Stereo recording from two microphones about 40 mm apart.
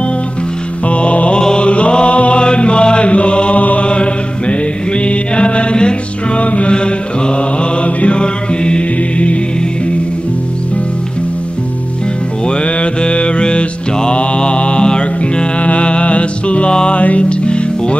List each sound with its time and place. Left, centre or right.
0.8 s music: left
1.4 s chant: left
6.7 s mantra: left
12.4 s mantra: left
15.6 s music: left